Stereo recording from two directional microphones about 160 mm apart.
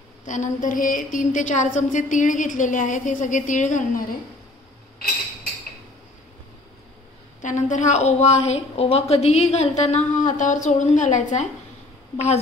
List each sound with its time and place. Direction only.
0.2 s a woman's voice: 50° left (ahead or behind)
7.4 s a woman's voice: 50° left (ahead or behind)